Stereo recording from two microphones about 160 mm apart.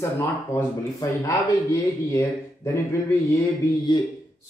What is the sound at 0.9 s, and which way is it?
Speech, 20° left (ahead or behind).